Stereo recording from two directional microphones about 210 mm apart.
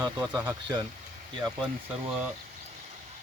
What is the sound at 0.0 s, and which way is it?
Speech, 15° right (ahead or behind).